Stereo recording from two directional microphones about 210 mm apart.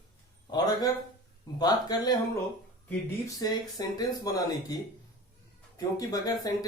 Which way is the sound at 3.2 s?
15° left (ahead or behind).